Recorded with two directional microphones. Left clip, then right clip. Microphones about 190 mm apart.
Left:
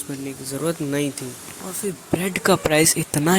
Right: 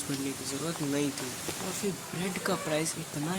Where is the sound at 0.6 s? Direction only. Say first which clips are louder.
Left 9 dB; 40° left (ahead or behind).